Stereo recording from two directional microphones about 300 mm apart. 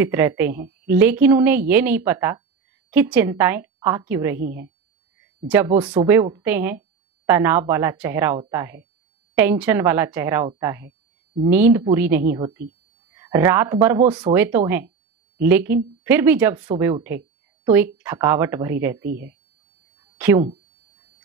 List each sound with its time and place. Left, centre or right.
0.0 s speech: centre
20.2 s speech: centre